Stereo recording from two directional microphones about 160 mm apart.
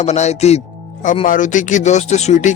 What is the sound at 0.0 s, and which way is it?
Speech, 45° left (ahead or behind).